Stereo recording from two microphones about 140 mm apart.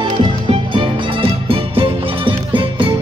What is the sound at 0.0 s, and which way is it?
Music, 35° right (ahead or behind).